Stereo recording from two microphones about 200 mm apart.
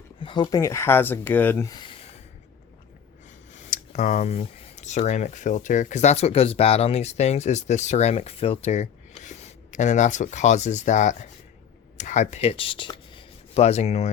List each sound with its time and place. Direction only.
0.2 s speech: 25° left (ahead or behind)
3.5 s speech: 35° left (ahead or behind)